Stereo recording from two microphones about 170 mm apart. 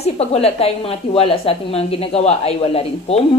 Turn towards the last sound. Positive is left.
turn(degrees=35)  # may be behind; listen again after turning